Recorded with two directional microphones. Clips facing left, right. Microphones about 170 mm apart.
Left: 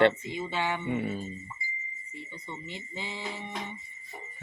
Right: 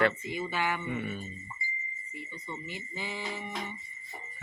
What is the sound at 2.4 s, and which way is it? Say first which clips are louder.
Speech: right 1 dB; 25° left (ahead or behind).